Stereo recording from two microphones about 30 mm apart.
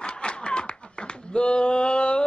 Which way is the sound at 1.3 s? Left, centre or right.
Left.